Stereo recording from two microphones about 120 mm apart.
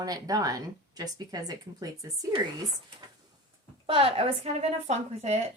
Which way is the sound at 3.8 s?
50° right (ahead or behind).